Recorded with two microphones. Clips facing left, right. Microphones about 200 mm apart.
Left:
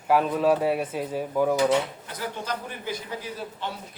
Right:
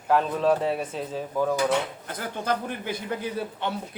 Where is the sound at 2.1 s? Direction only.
50° right (ahead or behind).